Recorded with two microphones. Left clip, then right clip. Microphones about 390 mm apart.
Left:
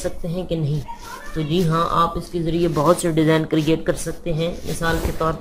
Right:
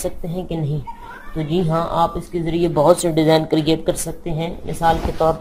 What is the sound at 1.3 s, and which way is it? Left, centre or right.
Speech, centre.